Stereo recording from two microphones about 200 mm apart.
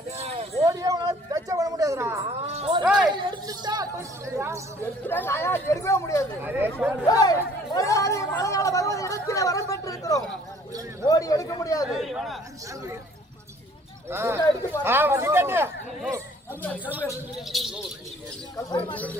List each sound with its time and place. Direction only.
0.2 s a sound: 30° right (ahead or behind)
0.6 s a sound: 15° right (ahead or behind)
2.4 s a sound: 30° right (ahead or behind)
4.4 s speech: 15° right (ahead or behind)
5.0 s speech: 10° left (ahead or behind)
6.4 s speech: 10° right (ahead or behind)
7.0 s chatter: 20° left (ahead or behind)
11.1 s speech: 15° left (ahead or behind)
11.9 s a sound: centre (ahead or behind)
14.1 s speech: 10° right (ahead or behind)
16.8 s speech: 10° right (ahead or behind)
18.5 s speech: 20° left (ahead or behind)